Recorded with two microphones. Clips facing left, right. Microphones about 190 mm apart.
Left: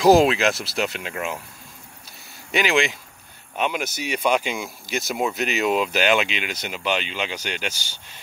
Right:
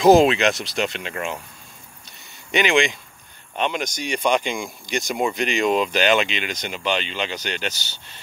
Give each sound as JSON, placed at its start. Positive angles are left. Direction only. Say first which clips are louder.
{"t": 0.0, "sound": "speech", "louder": "right 1 dB", "side_deg": 0}
{"t": 2.5, "sound": "speech", "louder": "right 2 dB", "side_deg": 0}